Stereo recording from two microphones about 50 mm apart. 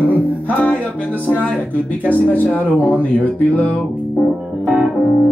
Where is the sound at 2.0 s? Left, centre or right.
Left.